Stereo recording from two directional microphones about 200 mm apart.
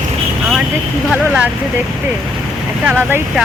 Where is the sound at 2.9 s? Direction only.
10° right (ahead or behind).